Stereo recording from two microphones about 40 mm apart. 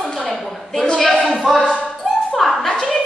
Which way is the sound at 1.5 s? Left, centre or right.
Centre.